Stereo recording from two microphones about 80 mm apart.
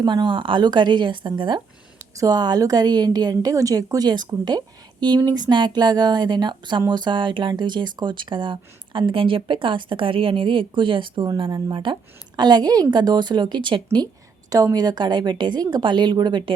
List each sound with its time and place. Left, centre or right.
0.0 s a woman's voice: right
2.1 s a woman's voice: right
12.4 s a woman's voice: right
14.5 s a woman's voice: right